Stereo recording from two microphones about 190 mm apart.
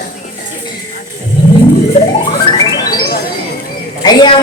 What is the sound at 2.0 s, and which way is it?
Music, 35° left (ahead or behind).